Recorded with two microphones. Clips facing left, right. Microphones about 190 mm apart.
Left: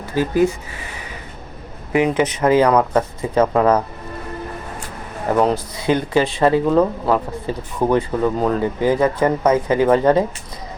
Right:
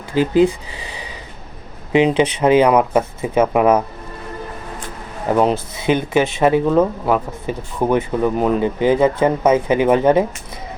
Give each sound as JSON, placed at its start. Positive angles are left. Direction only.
{"t": 0.1, "sound": "speech", "side_deg": -20}
{"t": 1.9, "sound": "speech", "side_deg": -20}
{"t": 5.3, "sound": "speech", "side_deg": -20}